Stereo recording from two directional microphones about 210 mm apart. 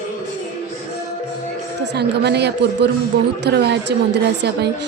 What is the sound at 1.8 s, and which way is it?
A woman's voice, 50° right (ahead or behind).